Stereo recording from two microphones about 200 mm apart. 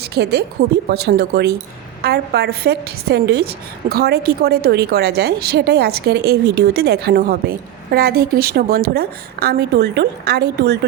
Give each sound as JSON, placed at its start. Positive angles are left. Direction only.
{"t": 0.0, "sound": "a woman's voice", "side_deg": -55}